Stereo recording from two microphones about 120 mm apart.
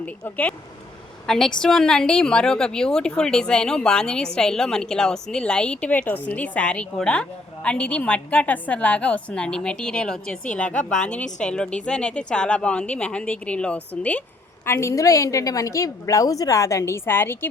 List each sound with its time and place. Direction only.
0.0 s a woman's voice: 10° left (ahead or behind)
14.6 s a woman's voice: 20° left (ahead or behind)